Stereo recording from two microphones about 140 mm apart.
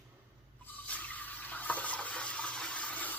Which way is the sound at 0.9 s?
10° left (ahead or behind).